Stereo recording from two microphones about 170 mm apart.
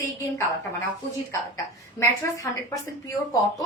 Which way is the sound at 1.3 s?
15° left (ahead or behind).